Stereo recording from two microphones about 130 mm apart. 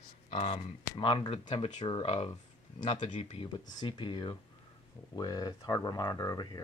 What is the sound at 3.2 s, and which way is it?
Speech, 40° left (ahead or behind).